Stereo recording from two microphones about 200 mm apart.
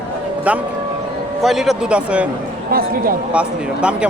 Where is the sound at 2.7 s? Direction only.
50° right (ahead or behind).